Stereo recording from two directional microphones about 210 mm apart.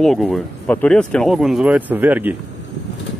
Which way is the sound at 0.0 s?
Centre (ahead or behind).